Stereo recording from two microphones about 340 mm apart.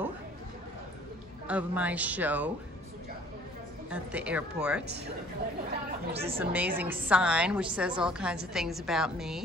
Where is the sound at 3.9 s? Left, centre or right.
Centre.